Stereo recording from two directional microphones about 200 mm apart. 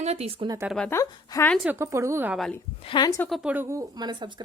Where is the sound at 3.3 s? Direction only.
5° right (ahead or behind); by 4.3 s 20° right (ahead or behind).